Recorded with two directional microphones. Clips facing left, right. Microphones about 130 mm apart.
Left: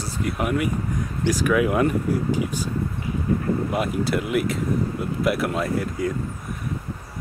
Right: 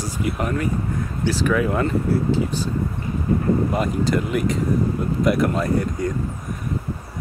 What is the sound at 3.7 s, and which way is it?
Speech, 5° left (ahead or behind).